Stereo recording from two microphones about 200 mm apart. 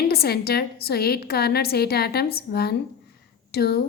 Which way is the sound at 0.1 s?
50° left (ahead or behind).